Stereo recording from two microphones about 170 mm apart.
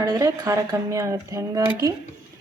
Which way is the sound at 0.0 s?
20° right (ahead or behind).